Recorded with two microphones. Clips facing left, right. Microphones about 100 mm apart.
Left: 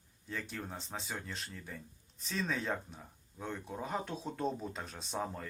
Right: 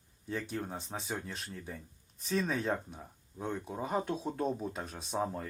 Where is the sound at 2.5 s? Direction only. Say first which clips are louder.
Right 3 dB; 10° right (ahead or behind).